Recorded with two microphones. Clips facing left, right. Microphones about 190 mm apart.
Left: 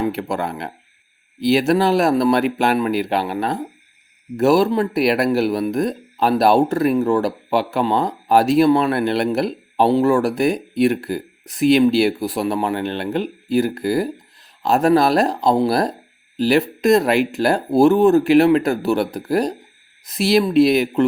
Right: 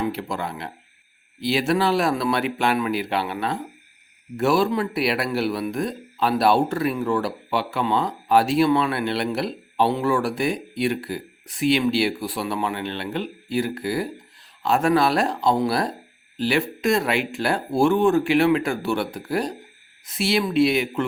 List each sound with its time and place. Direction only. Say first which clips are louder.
0.0 s speech: left 5 dB; 50° left (ahead or behind)